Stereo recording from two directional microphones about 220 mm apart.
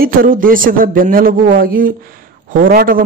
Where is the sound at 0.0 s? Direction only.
40° right (ahead or behind).